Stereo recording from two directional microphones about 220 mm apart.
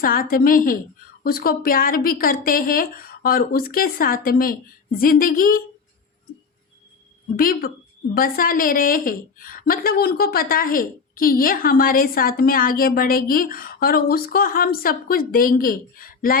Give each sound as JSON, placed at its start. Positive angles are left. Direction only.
{"t": 0.0, "sound": "a woman's voice", "side_deg": 40}
{"t": 7.3, "sound": "a woman's voice", "side_deg": 40}